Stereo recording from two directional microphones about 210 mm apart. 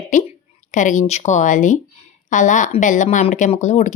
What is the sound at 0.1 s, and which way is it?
Speech, 35° left (ahead or behind).